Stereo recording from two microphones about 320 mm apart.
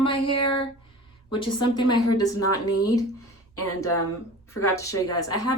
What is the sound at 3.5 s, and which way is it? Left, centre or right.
Speech, left.